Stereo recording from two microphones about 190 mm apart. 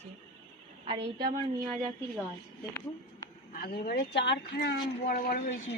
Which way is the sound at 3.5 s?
55° left (ahead or behind).